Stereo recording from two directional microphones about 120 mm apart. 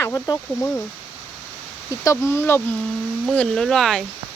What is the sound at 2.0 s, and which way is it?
Speech, 25° left (ahead or behind).